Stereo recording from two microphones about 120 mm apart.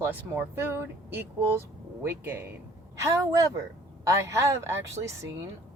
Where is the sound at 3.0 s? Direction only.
30° right (ahead or behind).